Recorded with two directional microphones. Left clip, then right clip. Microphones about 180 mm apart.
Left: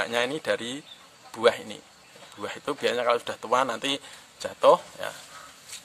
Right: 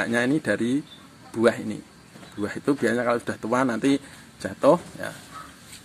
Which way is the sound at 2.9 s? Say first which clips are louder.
Left 2 dB; 25° left (ahead or behind).